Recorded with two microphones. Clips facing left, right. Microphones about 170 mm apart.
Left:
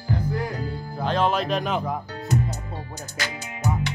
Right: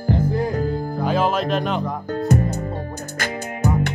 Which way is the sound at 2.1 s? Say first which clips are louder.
Right 11 dB; 50° right (ahead or behind).